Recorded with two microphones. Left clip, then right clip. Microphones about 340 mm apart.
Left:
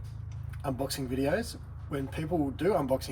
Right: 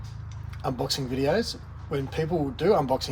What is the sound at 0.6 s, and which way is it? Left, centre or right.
Speech, right.